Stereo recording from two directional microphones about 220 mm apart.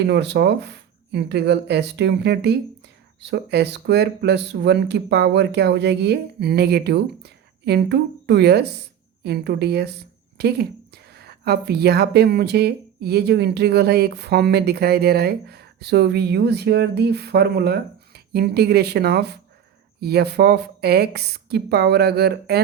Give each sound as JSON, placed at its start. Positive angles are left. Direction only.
{"t": 0.0, "sound": "speech", "side_deg": -50}